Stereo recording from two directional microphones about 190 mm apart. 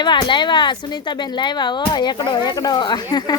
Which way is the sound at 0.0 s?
25° left (ahead or behind).